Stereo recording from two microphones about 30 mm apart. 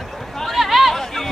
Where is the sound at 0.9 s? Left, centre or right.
Centre.